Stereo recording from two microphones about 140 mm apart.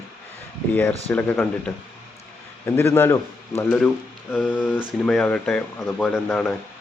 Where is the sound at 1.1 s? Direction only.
10° left (ahead or behind).